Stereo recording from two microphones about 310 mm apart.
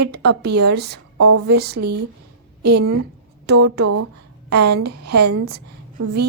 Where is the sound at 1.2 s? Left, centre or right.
Right.